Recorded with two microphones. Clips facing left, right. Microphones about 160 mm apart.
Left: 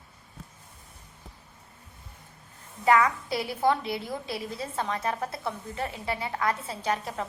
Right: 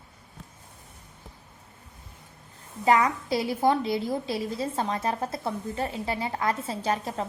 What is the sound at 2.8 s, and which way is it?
A woman's voice, 25° right (ahead or behind).